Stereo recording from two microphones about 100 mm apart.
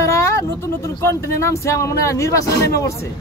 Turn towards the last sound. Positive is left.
turn(degrees=30)  # may be behind; listen again after turning